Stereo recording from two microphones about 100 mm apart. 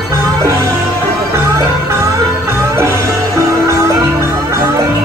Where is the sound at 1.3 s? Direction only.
30° right (ahead or behind).